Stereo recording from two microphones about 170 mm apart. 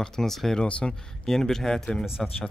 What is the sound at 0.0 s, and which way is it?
Speech, 5° left (ahead or behind).